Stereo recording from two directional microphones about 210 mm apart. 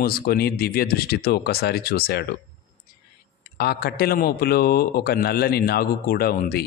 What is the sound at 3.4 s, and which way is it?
Speech, 50° left (ahead or behind).